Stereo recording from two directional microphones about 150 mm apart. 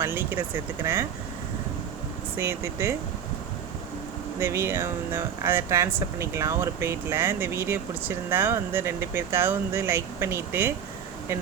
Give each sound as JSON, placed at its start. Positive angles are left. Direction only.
{"t": 0.0, "sound": "speech", "side_deg": -15}
{"t": 2.3, "sound": "speech", "side_deg": -15}
{"t": 4.4, "sound": "speech", "side_deg": -15}